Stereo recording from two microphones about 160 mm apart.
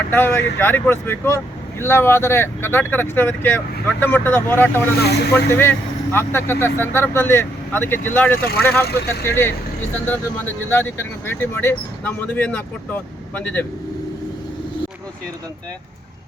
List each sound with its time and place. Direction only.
0.1 s speech: 15° left (ahead or behind)
4.9 s speech: 90° left
5.3 s speech: 15° left (ahead or behind)
10.7 s speech: 15° left (ahead or behind)